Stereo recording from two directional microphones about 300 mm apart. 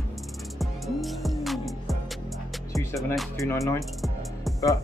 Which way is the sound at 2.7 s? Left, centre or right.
Centre.